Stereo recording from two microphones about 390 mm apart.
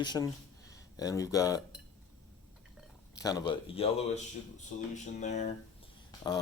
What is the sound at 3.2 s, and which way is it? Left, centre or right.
Speech, centre.